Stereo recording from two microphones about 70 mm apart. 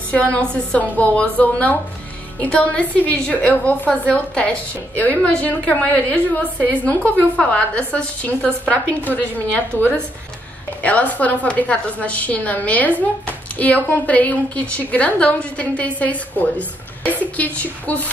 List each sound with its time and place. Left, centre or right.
0.1 s a woman's voice: centre